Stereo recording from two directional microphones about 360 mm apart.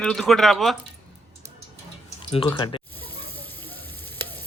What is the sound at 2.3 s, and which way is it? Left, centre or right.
Water, centre.